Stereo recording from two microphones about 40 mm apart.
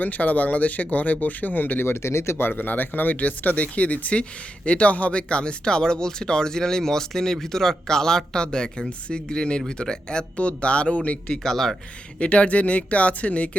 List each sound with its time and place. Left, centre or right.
0.0 s speech: left
1.8 s speech: left
2.5 s speech: left
11.3 s speech: centre
12.2 s speech: left